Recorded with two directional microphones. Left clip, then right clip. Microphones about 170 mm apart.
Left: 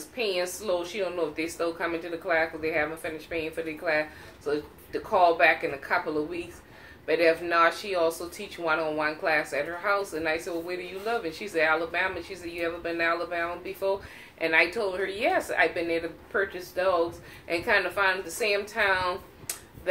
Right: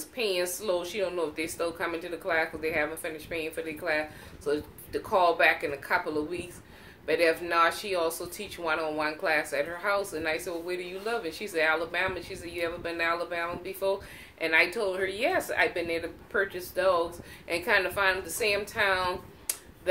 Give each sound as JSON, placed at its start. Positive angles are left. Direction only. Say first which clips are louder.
{"t": 0.1, "sound": "a woman's voice", "louder": "left 1 dB", "side_deg": -45}